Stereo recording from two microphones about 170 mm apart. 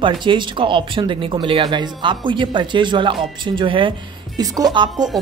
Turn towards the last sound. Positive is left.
turn(degrees=-25)  # may be behind; listen again after turning